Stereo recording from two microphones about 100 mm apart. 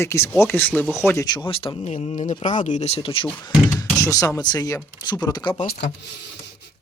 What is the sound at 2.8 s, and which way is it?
Speech, 75° left (ahead or behind).